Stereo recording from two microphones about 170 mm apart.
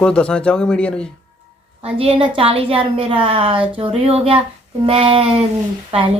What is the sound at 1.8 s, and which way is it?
A woman's voice, 35° right (ahead or behind).